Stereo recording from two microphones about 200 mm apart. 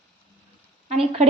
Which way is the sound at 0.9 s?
30° right (ahead or behind).